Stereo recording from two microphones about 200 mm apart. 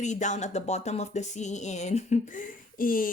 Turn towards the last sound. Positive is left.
turn(degrees=45)  # may be behind; listen again after turning